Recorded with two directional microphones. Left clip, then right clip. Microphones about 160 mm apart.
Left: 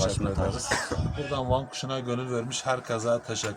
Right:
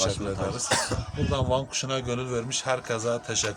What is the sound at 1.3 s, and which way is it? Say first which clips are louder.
A man's voice: right 2 dB; 5° right (ahead or behind).